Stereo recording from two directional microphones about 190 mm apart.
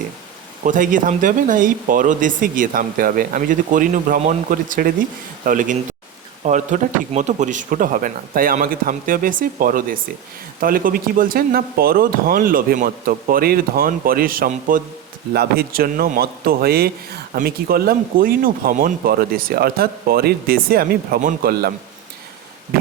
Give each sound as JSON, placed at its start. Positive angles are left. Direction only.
{"t": 0.6, "sound": "speech", "side_deg": -45}